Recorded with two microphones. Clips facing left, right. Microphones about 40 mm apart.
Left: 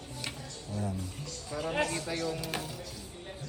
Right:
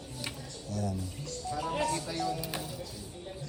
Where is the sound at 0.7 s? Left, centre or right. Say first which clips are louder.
Right 1 dB; left.